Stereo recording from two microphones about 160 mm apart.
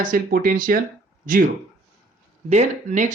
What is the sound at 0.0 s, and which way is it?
Speech, 65° right (ahead or behind).